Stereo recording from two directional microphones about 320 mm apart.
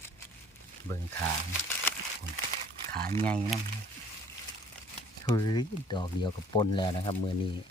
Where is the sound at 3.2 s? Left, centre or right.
Centre.